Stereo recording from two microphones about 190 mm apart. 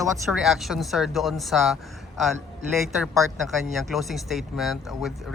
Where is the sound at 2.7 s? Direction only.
Centre (ahead or behind).